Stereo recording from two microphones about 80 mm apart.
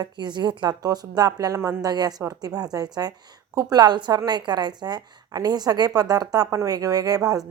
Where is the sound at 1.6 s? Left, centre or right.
Right.